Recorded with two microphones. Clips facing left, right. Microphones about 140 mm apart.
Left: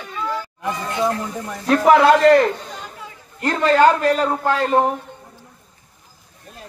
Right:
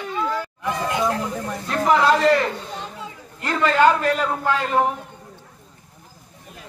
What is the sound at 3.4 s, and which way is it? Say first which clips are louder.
A man's voice: left 3 dB; 40° left (ahead or behind).